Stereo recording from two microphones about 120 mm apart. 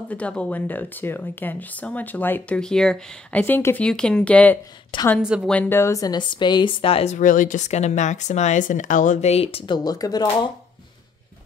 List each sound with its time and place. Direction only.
0.1 s speech: 10° left (ahead or behind)
2.6 s speech: 5° left (ahead or behind)
3.8 s speech: 5° left (ahead or behind)
5.2 s a woman's voice: 5° right (ahead or behind)
5.5 s speech: 15° left (ahead or behind); by 7.2 s 55° left (ahead or behind)
7.2 s speech: 90° left; by 9.8 s 50° left (ahead or behind)
9.8 s speech: 30° left (ahead or behind)